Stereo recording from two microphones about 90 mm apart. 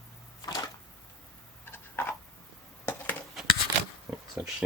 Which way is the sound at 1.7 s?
20° left (ahead or behind).